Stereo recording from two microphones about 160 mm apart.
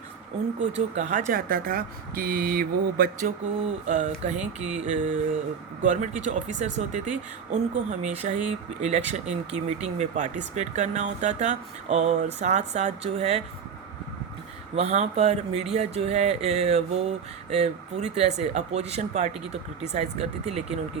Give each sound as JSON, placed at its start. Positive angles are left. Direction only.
{"t": 0.6, "sound": "speech", "side_deg": -50}
{"t": 1.3, "sound": "speech", "side_deg": -65}
{"t": 3.8, "sound": "speech", "side_deg": -45}
{"t": 14.8, "sound": "speech", "side_deg": -45}
{"t": 15.7, "sound": "mantra", "side_deg": -40}